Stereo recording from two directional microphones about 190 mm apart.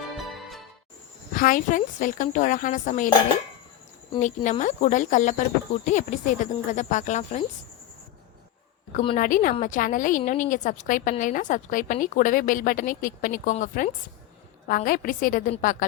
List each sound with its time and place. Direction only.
0.2 s music: centre (ahead or behind)
1.3 s a woman's voice: 45° left (ahead or behind)
4.2 s speech: 40° left (ahead or behind)
8.9 s a woman's voice: 35° left (ahead or behind)